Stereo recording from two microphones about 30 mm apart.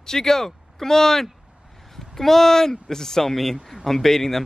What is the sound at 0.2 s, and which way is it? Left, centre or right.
A man's voice, centre.